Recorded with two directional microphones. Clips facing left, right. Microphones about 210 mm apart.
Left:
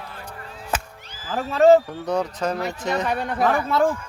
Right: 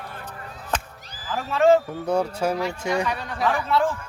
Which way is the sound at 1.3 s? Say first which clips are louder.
Left 3 dB; 40° left (ahead or behind).